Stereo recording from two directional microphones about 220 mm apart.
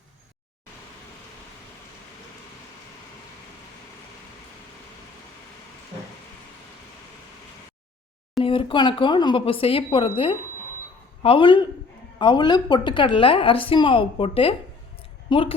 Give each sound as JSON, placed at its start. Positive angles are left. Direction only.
{"t": 8.4, "sound": "a woman's voice", "side_deg": 25}